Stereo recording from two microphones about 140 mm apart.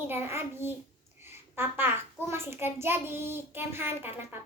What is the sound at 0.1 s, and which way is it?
Speech, 15° right (ahead or behind).